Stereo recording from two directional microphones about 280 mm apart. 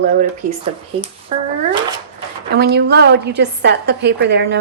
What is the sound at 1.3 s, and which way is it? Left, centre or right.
Speech, right.